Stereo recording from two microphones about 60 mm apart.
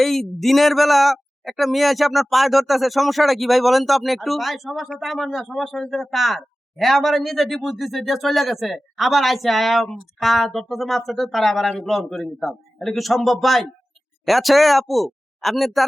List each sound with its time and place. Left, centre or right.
0.0 s a man's voice: centre